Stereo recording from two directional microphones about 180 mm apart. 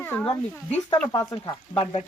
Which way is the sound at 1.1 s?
25° left (ahead or behind).